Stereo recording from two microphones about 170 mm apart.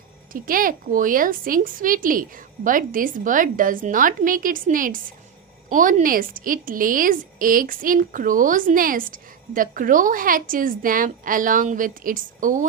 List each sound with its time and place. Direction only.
0.3 s a woman's voice: 55° right (ahead or behind)